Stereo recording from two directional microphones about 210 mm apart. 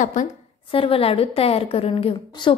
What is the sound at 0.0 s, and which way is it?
Speech, 35° left (ahead or behind).